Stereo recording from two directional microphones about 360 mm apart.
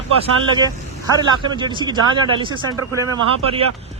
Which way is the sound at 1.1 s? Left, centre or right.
Centre.